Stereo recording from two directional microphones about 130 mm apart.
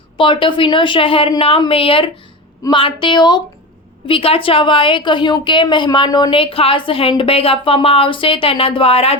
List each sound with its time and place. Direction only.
0.2 s a woman's voice: 40° left (ahead or behind)
4.0 s a woman's voice: 45° left (ahead or behind)
6.3 s a woman's voice: 45° left (ahead or behind)